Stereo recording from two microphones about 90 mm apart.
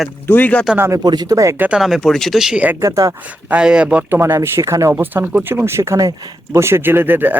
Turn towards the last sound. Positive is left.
turn(degrees=-20)  # may be behind; listen again after turning